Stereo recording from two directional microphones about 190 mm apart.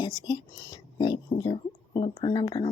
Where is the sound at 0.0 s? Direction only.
20° left (ahead or behind).